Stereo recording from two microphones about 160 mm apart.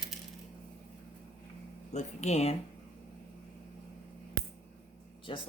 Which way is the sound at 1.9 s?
45° left (ahead or behind).